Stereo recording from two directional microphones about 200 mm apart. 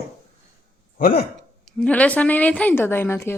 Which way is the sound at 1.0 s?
45° left (ahead or behind).